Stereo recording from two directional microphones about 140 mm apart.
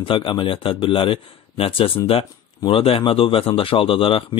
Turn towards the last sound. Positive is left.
turn(degrees=40)  # may be behind; listen again after turning